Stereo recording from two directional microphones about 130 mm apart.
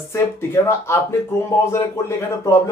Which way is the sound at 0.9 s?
20° left (ahead or behind).